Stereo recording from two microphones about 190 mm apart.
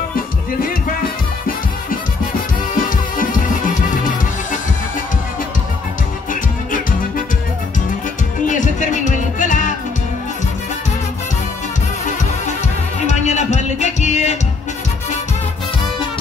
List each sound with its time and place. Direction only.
3.2 s music: 45° left (ahead or behind)
8.5 s music: 40° left (ahead or behind)
13.0 s music: 35° left (ahead or behind)